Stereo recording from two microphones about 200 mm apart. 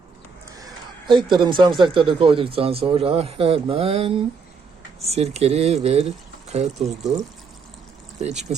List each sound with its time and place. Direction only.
0.6 s speech: 25° right (ahead or behind)
8.2 s speech: 35° right (ahead or behind)